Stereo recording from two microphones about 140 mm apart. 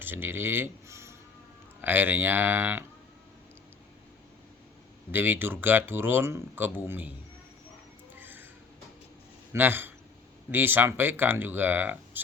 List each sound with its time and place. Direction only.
0.0 s speech: 15° right (ahead or behind)
5.1 s speech: 15° right (ahead or behind)
8.2 s music: 15° right (ahead or behind)
9.5 s a man's voice: 15° right (ahead or behind)